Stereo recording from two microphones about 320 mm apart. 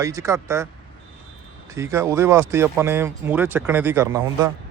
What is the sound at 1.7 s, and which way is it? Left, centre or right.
Speech, centre.